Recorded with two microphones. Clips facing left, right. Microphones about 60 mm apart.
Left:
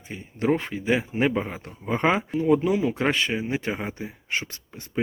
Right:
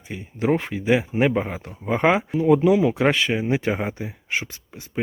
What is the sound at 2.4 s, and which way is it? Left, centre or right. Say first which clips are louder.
Speech: right 5 dB; right.